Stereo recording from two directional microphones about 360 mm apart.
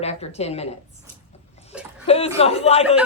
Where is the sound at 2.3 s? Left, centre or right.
Centre.